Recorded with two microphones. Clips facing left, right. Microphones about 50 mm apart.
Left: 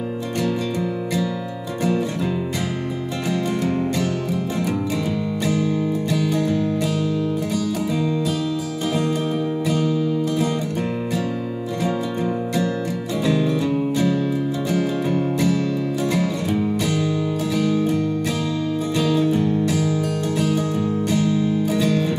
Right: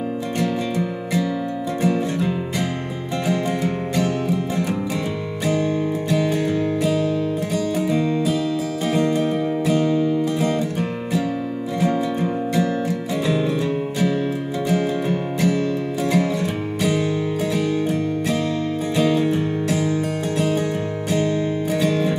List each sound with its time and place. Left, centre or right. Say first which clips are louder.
0.4 s music: even; centre
3.3 s music: even; centre
6.1 s music: right 2 dB; right
11.8 s music: right 3 dB; centre
19.0 s music: left 2 dB; right
21.1 s music: right 2 dB; right
21.8 s music: even; centre